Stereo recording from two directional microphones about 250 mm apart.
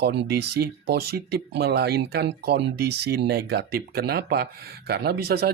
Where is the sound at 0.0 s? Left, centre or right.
Right.